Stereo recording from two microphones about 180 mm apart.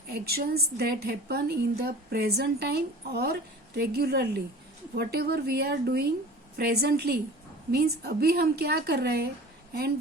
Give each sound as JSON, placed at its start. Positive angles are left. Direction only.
{"t": 0.1, "sound": "a woman's voice", "side_deg": -60}